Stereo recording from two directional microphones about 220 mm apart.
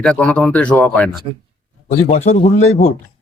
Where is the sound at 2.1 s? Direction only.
30° left (ahead or behind).